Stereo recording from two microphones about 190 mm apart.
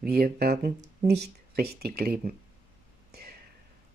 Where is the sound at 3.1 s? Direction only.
55° right (ahead or behind).